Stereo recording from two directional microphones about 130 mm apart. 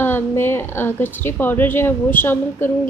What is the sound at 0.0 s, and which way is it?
A woman's voice, 15° left (ahead or behind).